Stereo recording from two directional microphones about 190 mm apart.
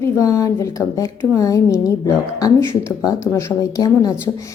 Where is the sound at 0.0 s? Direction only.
15° left (ahead or behind).